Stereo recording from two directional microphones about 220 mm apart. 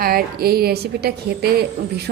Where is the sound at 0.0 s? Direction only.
40° right (ahead or behind).